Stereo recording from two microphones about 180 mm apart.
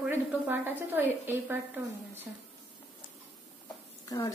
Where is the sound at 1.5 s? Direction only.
10° right (ahead or behind).